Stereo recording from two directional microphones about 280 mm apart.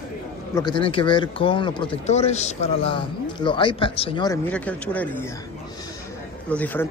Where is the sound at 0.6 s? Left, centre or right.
Centre.